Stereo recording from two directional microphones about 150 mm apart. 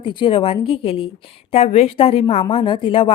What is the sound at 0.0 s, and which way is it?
A woman's voice, 35° left (ahead or behind).